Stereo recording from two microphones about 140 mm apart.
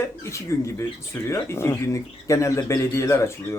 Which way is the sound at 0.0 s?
20° left (ahead or behind).